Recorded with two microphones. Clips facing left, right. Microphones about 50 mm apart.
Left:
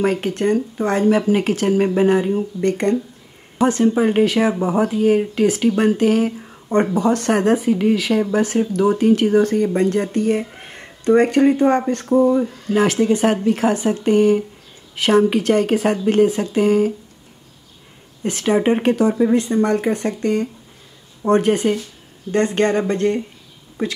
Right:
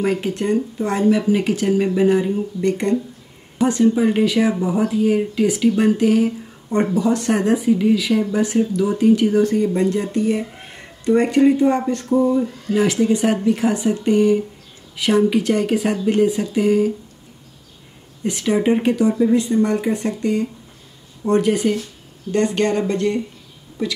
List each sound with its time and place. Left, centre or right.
0.0 s speech: left
2.0 s speech: left
18.2 s speech: left